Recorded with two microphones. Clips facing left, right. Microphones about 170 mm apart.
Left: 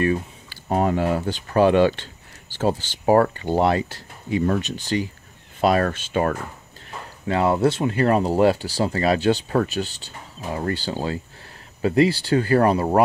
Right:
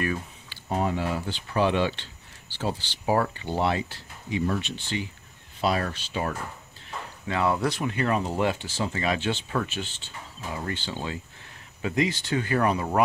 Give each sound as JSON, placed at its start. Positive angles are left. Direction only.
{"t": 0.7, "sound": "speech", "side_deg": 50}
{"t": 5.6, "sound": "speech", "side_deg": 55}
{"t": 7.2, "sound": "speech", "side_deg": 30}